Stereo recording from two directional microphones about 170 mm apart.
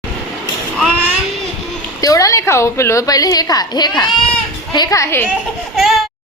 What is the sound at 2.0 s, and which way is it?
A woman's voice, 20° left (ahead or behind).